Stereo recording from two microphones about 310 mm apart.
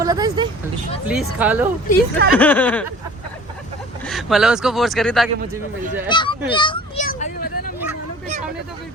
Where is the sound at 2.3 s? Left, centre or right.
Centre.